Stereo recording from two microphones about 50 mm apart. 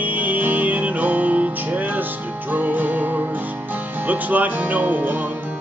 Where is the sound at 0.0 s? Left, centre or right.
Right.